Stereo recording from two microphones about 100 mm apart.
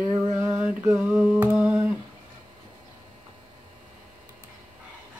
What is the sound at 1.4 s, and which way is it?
Humming, 15° right (ahead or behind).